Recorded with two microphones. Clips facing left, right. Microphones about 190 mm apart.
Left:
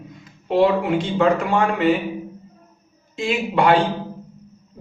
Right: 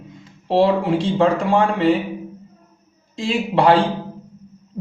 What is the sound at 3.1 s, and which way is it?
Speech, 35° right (ahead or behind).